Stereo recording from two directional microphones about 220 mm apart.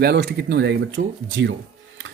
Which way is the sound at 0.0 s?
50° right (ahead or behind).